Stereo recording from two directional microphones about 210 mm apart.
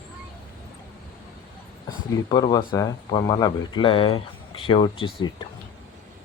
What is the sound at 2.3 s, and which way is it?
Speech, 20° left (ahead or behind).